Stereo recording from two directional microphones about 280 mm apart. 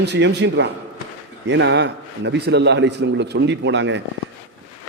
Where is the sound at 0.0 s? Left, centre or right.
Right.